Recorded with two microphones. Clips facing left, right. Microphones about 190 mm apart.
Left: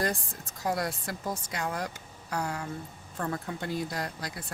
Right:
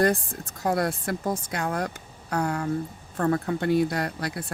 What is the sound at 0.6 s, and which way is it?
Speech, 55° right (ahead or behind).